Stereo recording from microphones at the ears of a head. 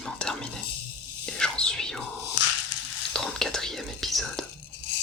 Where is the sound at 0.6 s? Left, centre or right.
Left.